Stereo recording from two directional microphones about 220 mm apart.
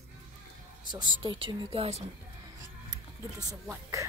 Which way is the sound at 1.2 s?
25° right (ahead or behind).